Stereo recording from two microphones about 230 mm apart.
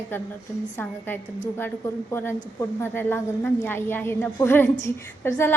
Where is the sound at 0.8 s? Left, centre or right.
Centre.